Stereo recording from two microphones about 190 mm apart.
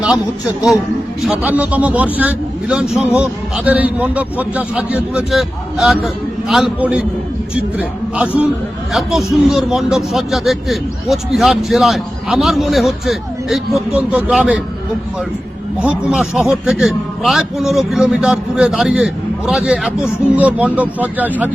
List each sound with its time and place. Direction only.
1.2 s a man's voice: 5° right (ahead or behind)
15.8 s a man's voice: 5° right (ahead or behind)